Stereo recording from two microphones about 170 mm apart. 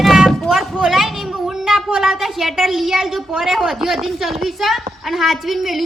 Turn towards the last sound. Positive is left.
turn(degrees=0)  # may be behind; listen again after turning